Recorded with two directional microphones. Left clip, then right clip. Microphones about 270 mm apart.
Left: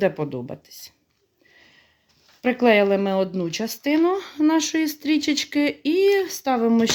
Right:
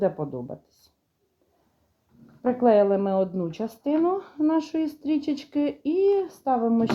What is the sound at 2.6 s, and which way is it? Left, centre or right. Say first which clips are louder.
Speech: left 2 dB; left.